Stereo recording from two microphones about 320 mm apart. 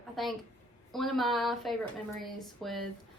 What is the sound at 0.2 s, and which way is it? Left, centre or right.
A woman's voice, centre.